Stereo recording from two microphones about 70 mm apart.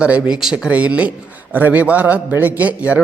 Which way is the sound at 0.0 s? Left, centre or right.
Centre.